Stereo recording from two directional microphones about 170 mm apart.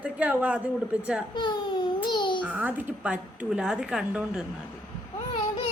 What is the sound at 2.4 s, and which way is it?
A woman's voice, 10° right (ahead or behind).